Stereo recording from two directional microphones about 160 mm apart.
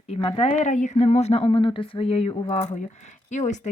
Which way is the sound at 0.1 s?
35° left (ahead or behind).